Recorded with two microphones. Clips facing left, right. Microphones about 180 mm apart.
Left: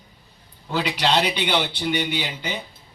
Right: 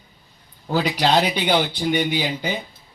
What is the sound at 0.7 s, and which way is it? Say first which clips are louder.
Speech: right 3 dB; 40° right (ahead or behind).